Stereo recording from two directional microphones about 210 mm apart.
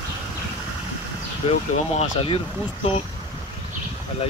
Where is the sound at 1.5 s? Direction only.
30° left (ahead or behind).